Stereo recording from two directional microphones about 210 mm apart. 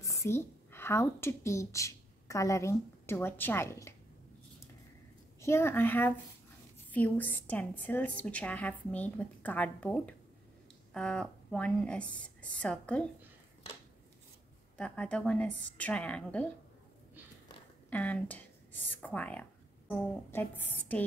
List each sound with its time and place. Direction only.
0.0 s speech: 15° left (ahead or behind)
5.4 s a woman's voice: 10° left (ahead or behind)
14.8 s speech: 5° left (ahead or behind)
17.8 s a woman's voice: 5° left (ahead or behind)